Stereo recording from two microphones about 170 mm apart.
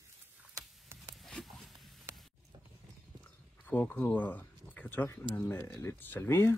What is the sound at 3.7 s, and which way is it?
Speech, 10° left (ahead or behind).